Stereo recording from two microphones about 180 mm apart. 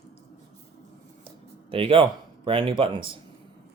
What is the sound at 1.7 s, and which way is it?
Speech, 30° right (ahead or behind).